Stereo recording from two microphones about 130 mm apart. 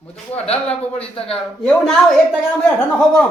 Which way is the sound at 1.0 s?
45° left (ahead or behind).